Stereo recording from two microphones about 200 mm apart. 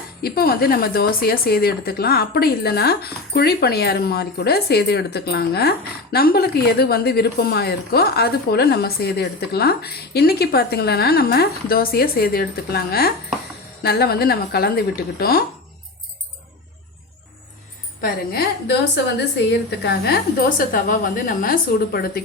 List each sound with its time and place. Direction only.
0.2 s a woman's voice: 50° left (ahead or behind)
18.0 s a woman's voice: 50° left (ahead or behind)